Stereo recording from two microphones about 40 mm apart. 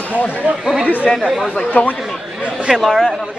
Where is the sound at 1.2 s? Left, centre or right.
Centre.